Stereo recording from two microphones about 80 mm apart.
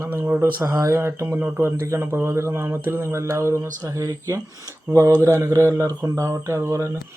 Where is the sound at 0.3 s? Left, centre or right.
Right.